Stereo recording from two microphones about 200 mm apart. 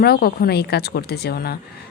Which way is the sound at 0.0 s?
50° left (ahead or behind).